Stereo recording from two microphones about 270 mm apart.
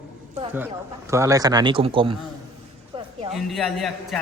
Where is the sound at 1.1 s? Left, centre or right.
Centre.